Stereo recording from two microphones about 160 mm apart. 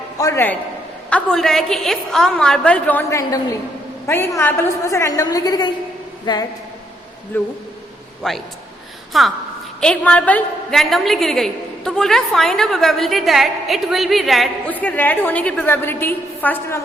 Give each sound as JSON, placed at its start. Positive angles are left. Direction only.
{"t": 0.2, "sound": "a man's voice", "side_deg": 15}
{"t": 1.1, "sound": "a woman's voice", "side_deg": 5}
{"t": 7.3, "sound": "a woman's voice", "side_deg": 15}
{"t": 14.7, "sound": "a woman's voice", "side_deg": 10}